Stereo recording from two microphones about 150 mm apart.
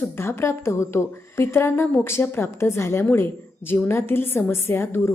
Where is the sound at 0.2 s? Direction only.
15° left (ahead or behind).